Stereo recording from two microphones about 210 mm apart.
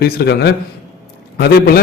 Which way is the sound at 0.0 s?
50° left (ahead or behind).